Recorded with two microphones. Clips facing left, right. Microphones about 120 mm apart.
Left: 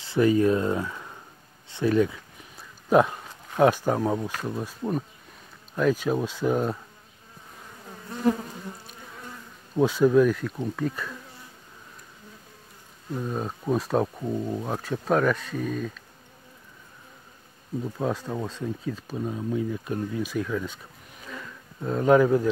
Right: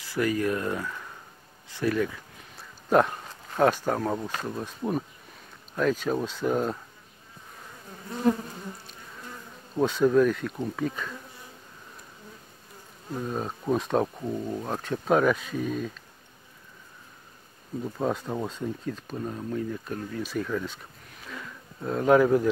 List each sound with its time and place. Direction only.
0.0 s speech: 25° left (ahead or behind)
2.9 s speech: 5° left (ahead or behind)
5.8 s speech: 5° left (ahead or behind)
9.8 s speech: 5° left (ahead or behind)
13.3 s speech: centre (ahead or behind)
17.8 s speech: centre (ahead or behind)
21.3 s a sound: centre (ahead or behind)